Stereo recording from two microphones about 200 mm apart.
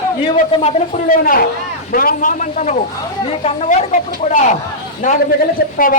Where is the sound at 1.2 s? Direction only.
45° left (ahead or behind).